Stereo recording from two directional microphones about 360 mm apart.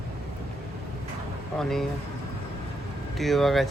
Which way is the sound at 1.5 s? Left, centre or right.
Centre.